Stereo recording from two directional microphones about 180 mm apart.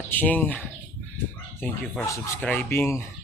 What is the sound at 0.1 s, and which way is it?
Speech, 10° left (ahead or behind).